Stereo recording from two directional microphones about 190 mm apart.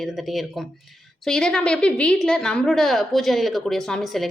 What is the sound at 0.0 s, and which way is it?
A woman's voice, centre (ahead or behind).